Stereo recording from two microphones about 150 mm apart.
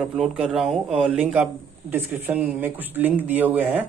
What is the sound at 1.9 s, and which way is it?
Speech, 15° right (ahead or behind).